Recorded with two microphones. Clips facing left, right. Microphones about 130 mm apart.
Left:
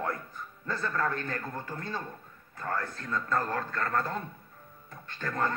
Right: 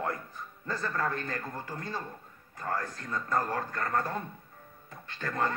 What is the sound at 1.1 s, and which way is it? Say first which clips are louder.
Speech: left 1 dB; 60° left (ahead or behind).